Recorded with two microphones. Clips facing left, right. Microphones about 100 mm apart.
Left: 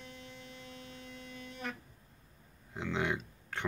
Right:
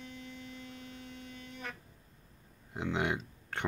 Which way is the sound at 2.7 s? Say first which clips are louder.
Right 1 dB; 15° right (ahead or behind).